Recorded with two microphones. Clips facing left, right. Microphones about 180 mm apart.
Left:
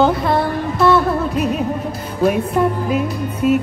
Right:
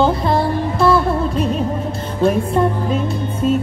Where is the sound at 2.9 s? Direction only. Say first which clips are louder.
Left 1 dB; 10° left (ahead or behind).